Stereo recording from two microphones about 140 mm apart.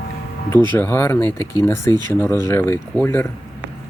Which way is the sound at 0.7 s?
15° left (ahead or behind).